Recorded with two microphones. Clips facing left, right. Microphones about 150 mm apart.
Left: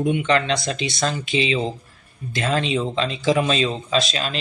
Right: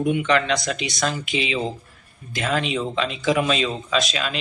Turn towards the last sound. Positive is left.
turn(degrees=30)  # may be behind; listen again after turning